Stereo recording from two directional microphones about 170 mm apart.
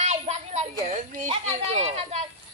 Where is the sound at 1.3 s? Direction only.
35° right (ahead or behind).